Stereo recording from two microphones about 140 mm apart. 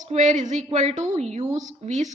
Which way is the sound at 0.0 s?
60° right (ahead or behind).